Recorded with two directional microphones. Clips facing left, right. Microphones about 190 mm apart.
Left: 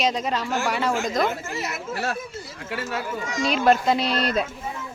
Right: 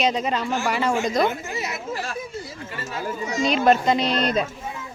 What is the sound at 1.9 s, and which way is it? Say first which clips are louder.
Speech: left 5 dB; 65° left (ahead or behind).